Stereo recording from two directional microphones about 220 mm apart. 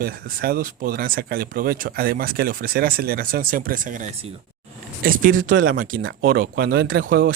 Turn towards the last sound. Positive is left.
turn(degrees=-40)  # may be behind; listen again after turning